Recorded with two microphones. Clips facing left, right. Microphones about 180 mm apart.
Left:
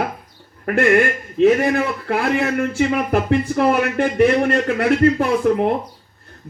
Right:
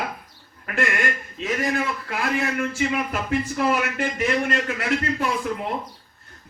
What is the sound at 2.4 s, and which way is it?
A man's voice, 50° left (ahead or behind).